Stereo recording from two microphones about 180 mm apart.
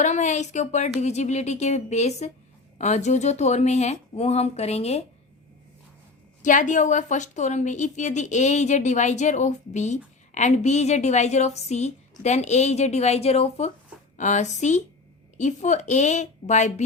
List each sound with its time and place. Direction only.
0.0 s a woman's voice: 40° left (ahead or behind)
6.4 s a woman's voice: 45° left (ahead or behind)